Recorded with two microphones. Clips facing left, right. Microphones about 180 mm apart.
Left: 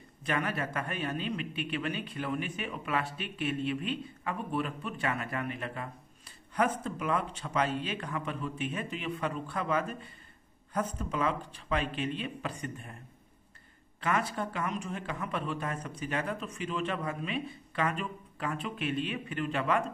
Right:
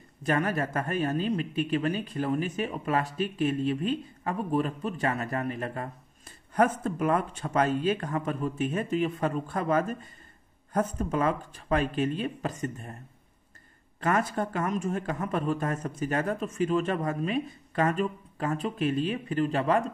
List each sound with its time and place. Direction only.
0.2 s a man's voice: 45° right (ahead or behind)
14.0 s speech: 45° right (ahead or behind)